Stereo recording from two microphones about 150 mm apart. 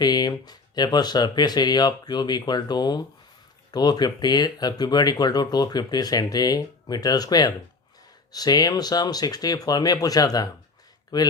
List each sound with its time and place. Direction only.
0.0 s speech: 25° left (ahead or behind)